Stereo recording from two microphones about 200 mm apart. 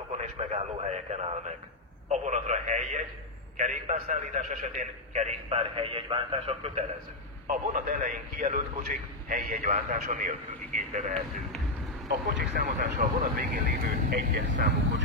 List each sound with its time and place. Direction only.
0.2 s a man's voice: 35° right (ahead or behind)
7.4 s a man's voice: 45° right (ahead or behind)
12.5 s speech: 50° right (ahead or behind)